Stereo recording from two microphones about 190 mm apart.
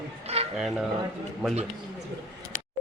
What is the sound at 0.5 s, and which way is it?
Speech, centre (ahead or behind).